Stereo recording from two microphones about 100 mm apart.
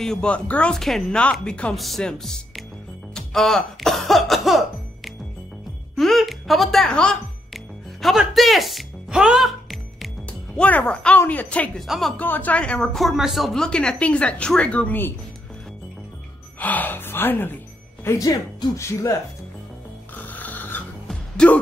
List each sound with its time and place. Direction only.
0.0 s speech: 5° left (ahead or behind)
3.2 s music: 5° left (ahead or behind)
10.6 s speech: 15° left (ahead or behind)
11.8 s speech: centre (ahead or behind)
12.2 s speech: 15° left (ahead or behind)
16.5 s music: 15° left (ahead or behind)
18.0 s speech: 35° left (ahead or behind)
20.2 s music: 15° left (ahead or behind)
21.4 s speech: 10° left (ahead or behind)